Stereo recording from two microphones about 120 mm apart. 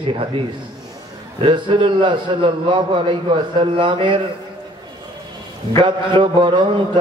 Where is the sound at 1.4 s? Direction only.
45° right (ahead or behind).